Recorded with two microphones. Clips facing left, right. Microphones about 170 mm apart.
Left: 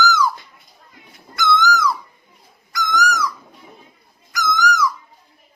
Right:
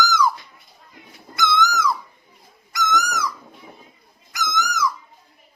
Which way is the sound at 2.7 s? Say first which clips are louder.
Left 2 dB; 20° right (ahead or behind).